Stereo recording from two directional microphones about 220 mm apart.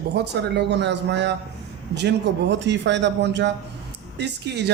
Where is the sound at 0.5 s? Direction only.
50° right (ahead or behind).